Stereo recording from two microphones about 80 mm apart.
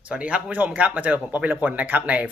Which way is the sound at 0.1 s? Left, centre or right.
Centre.